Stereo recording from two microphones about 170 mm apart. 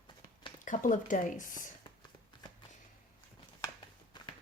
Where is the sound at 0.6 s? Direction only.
50° left (ahead or behind).